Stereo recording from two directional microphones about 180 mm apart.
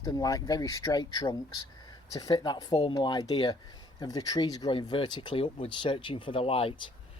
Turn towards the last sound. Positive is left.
turn(degrees=30)  # may be behind; listen again after turning